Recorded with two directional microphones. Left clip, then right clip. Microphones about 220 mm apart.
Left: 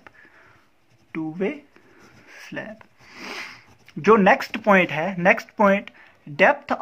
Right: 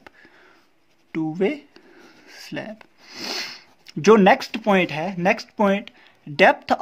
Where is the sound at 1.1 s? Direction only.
45° right (ahead or behind).